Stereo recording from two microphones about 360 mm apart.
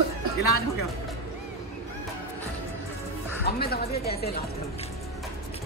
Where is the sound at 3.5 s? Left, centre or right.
Left.